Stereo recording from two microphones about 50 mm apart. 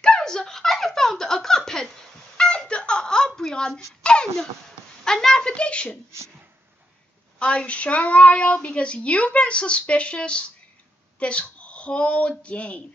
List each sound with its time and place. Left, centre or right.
0.0 s giggle: centre
5.0 s speech: centre
7.3 s speech: left